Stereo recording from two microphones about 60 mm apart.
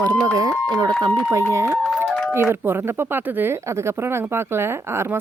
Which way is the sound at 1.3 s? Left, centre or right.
Right.